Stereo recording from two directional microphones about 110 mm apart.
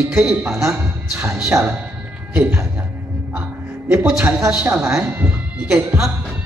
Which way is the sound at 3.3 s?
15° right (ahead or behind).